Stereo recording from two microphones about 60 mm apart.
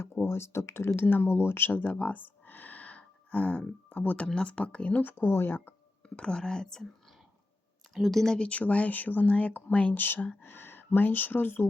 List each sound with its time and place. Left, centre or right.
0.0 s speech: left
0.9 s speech: left
1.8 s a sound: left
3.8 s speech: left
6.1 s speech: centre
7.9 s speech: centre
8.4 s speech: left